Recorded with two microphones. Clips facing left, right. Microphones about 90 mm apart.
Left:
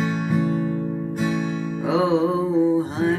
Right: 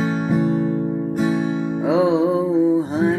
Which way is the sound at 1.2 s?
40° right (ahead or behind).